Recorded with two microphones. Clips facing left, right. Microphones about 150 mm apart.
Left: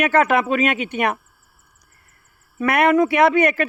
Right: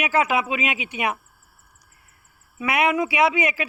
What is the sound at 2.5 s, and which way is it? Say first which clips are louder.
A man's voice: left 6 dB; 55° left (ahead or behind).